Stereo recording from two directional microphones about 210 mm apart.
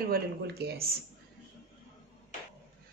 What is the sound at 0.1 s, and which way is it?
Speech, 50° right (ahead or behind).